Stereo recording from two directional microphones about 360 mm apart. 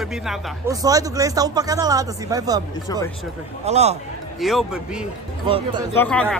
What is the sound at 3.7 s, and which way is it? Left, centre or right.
Speech, centre.